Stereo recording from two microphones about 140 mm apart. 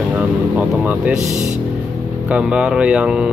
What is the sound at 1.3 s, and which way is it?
Speech, 55° right (ahead or behind).